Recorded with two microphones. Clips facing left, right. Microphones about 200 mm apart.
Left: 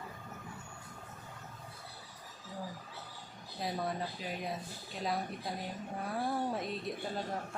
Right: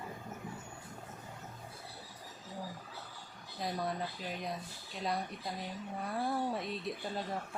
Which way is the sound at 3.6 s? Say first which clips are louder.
Even; centre (ahead or behind).